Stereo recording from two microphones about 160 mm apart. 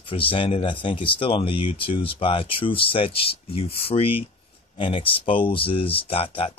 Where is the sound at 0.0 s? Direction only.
35° left (ahead or behind).